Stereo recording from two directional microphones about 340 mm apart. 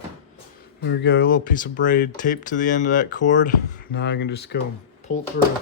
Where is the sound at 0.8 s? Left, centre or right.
Left.